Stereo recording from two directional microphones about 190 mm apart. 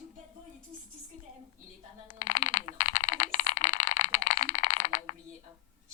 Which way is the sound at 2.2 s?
45° left (ahead or behind).